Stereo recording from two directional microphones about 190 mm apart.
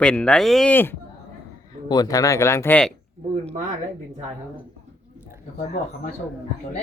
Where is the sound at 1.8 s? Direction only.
20° left (ahead or behind).